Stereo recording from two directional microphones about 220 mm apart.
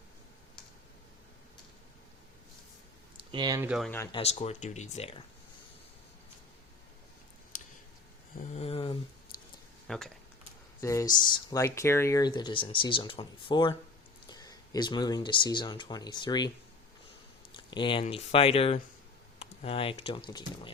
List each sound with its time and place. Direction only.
3.2 s a sound: 20° right (ahead or behind)
3.7 s speech: centre (ahead or behind)
3.9 s speech: 15° left (ahead or behind)
4.2 s speech: 30° left (ahead or behind)
7.5 s a sound: 35° left (ahead or behind)
8.5 s a sound: 25° left (ahead or behind)
9.8 s speech: centre (ahead or behind)
10.8 s speech: 15° left (ahead or behind)
17.6 s speech: 20° left (ahead or behind)